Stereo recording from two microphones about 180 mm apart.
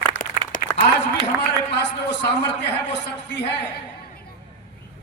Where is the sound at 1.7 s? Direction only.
75° left (ahead or behind).